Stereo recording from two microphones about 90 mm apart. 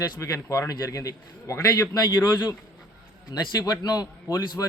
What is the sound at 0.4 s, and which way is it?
A man's voice, 35° left (ahead or behind).